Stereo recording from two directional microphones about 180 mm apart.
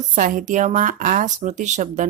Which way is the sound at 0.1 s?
50° right (ahead or behind).